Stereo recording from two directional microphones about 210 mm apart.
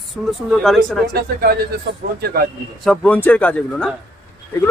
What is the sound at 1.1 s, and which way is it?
Speech, 45° right (ahead or behind).